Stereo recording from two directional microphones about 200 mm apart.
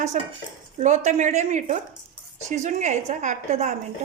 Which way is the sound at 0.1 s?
40° right (ahead or behind).